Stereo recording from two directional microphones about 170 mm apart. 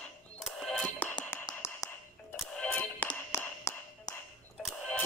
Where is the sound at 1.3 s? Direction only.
15° left (ahead or behind).